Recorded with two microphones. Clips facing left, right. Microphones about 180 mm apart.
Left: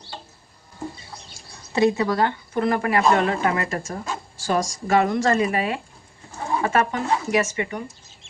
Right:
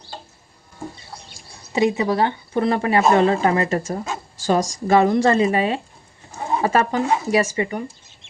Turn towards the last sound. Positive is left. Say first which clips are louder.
# right 3 dB
turn(degrees=-35)  # may be behind; listen again after turning